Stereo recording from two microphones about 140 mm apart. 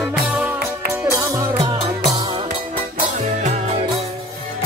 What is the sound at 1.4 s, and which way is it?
Music, 35° right (ahead or behind).